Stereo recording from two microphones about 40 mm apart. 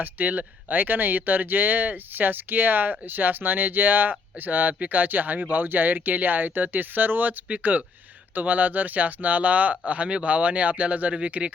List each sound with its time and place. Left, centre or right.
0.0 s speech: right